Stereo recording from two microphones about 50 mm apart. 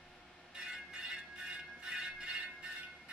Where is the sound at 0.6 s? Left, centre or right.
Centre.